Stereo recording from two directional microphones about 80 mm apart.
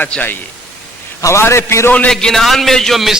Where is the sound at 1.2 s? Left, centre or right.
Left.